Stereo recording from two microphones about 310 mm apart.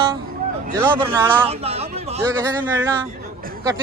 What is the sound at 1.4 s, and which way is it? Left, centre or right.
Speech, centre.